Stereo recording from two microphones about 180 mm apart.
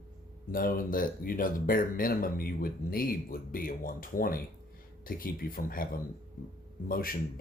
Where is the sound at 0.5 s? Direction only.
50° left (ahead or behind).